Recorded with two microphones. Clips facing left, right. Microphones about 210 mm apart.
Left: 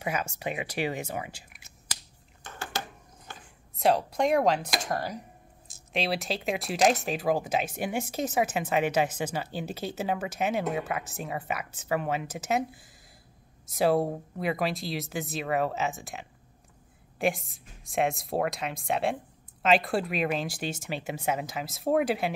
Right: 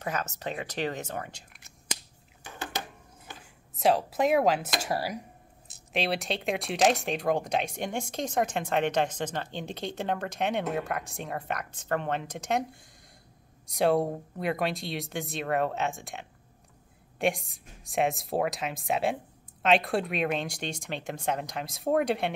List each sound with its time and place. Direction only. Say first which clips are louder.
0.0 s speech: left 1 dB; 10° left (ahead or behind)
2.4 s a sound: even; 15° right (ahead or behind)
3.7 s speech: even; centre (ahead or behind)